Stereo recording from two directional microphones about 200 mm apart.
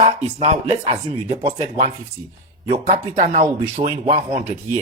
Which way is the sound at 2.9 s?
40° right (ahead or behind).